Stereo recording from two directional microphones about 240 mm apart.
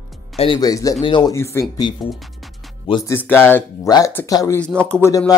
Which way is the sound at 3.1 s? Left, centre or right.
Centre.